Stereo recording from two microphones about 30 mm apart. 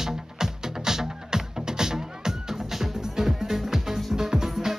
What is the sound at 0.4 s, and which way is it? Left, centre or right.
Music, centre.